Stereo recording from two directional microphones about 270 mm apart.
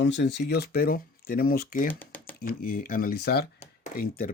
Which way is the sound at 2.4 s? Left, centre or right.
Left.